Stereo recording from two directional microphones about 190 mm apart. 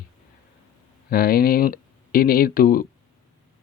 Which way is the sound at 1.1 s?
50° left (ahead or behind).